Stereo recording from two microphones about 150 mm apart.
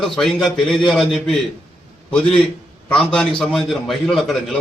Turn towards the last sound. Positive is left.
turn(degrees=5)  # may be behind; listen again after turning